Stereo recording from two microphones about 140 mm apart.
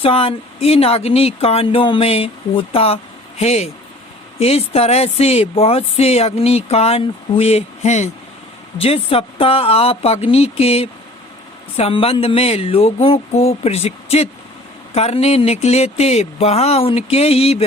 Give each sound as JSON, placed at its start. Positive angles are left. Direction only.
{"t": 0.0, "sound": "speech", "side_deg": 40}